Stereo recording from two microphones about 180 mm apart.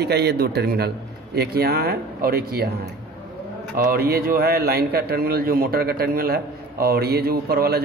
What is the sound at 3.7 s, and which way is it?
A man's voice, 55° right (ahead or behind).